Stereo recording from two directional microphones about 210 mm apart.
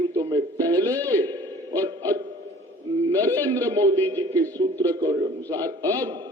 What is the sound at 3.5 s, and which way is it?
A man's voice, 15° right (ahead or behind).